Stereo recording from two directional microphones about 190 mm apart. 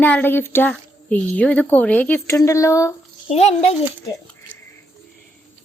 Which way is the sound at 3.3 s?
35° left (ahead or behind).